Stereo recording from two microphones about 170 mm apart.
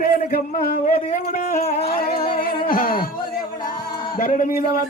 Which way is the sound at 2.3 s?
55° left (ahead or behind).